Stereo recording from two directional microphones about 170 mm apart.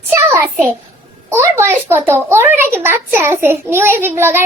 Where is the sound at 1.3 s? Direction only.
15° right (ahead or behind).